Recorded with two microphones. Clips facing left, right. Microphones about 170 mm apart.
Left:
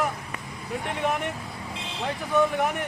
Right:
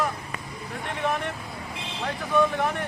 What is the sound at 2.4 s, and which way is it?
Speech, 15° left (ahead or behind).